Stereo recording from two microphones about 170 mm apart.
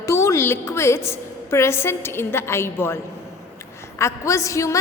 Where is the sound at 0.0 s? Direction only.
15° left (ahead or behind).